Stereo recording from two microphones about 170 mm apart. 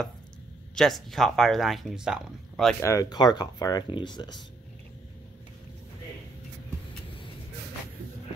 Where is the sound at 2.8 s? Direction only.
20° left (ahead or behind).